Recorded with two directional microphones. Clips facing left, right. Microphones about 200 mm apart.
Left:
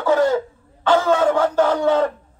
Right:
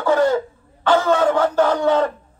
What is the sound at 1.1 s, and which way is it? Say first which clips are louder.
A man's voice: even; 5° left (ahead or behind).